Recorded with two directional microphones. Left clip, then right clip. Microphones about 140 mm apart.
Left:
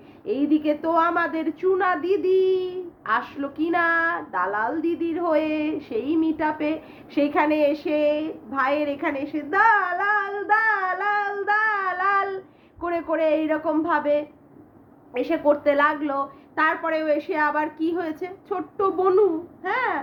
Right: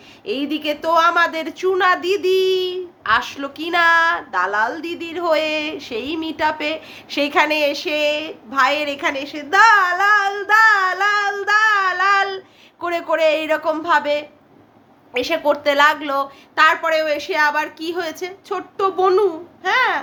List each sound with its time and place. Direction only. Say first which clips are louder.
0.3 s a woman's voice: even; 20° right (ahead or behind)